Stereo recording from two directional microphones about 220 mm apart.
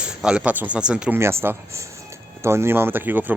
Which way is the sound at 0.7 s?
5° right (ahead or behind).